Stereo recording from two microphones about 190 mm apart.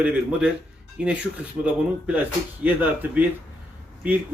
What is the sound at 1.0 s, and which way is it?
A man's voice, 5° right (ahead or behind).